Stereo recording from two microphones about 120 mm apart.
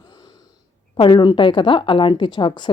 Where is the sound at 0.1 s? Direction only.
35° left (ahead or behind).